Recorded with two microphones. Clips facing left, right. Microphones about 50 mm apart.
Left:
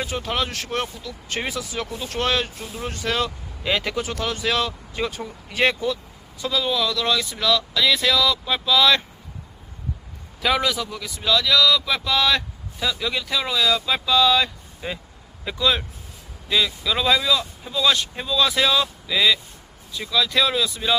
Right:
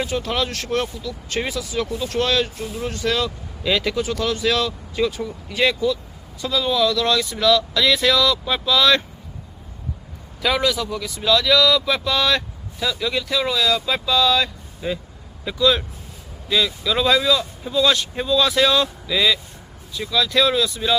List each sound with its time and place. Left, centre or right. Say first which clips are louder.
0.1 s speech: right 2 dB; left
6.5 s speech: right 4 dB; centre
10.4 s speech: right 1 dB; centre
16.5 s speech: right 1 dB; centre